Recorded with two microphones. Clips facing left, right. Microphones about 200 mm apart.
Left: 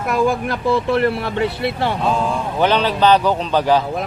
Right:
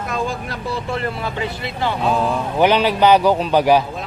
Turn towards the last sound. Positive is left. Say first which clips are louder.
# right 2 dB
turn(degrees=-10)  # may be behind; listen again after turning